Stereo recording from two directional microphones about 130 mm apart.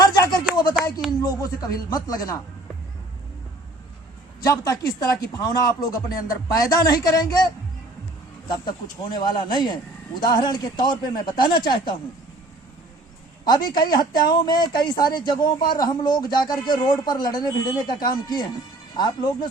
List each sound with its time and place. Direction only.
0.0 s a sound: 30° left (ahead or behind)
1.2 s speech: 30° left (ahead or behind)
4.4 s speech: 30° left (ahead or behind)
13.4 s speech: 30° left (ahead or behind)
18.9 s speech: 35° left (ahead or behind)